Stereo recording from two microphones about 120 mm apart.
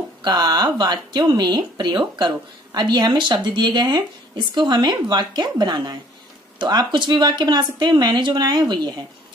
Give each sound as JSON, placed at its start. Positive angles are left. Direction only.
{"t": 0.2, "sound": "speech", "side_deg": -35}